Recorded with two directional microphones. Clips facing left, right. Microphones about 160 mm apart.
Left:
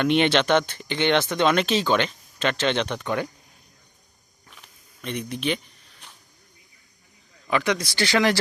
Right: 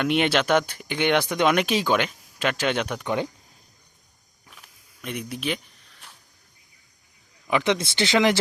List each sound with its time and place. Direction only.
0.0 s speech: 5° right (ahead or behind)
4.4 s a sound: 5° right (ahead or behind)
7.4 s speech: 20° right (ahead or behind)